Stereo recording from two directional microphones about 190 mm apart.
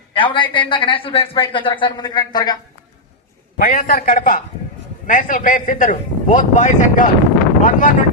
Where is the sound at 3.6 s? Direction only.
50° left (ahead or behind).